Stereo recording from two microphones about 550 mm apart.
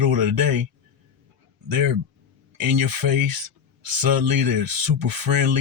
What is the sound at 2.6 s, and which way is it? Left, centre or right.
Speech, right.